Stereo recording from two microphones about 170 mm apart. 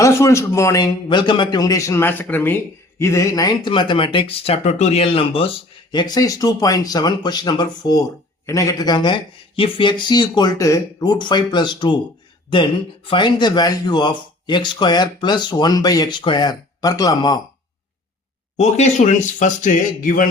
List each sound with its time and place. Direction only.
0.0 s a man's voice: 15° left (ahead or behind)
13.1 s speech: 25° left (ahead or behind)
18.5 s speech: 40° left (ahead or behind)